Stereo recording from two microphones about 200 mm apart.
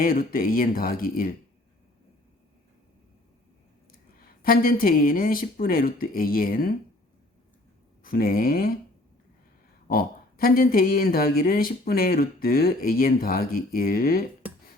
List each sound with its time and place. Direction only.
0.0 s speech: 45° left (ahead or behind)
4.4 s speech: 45° left (ahead or behind)
8.0 s speech: 45° left (ahead or behind)
9.8 s speech: 45° left (ahead or behind)